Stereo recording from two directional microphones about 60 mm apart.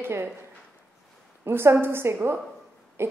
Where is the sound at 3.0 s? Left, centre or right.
Right.